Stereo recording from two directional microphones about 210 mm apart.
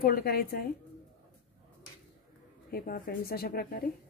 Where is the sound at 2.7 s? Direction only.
45° left (ahead or behind).